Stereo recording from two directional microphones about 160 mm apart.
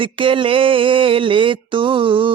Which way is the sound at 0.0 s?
30° right (ahead or behind).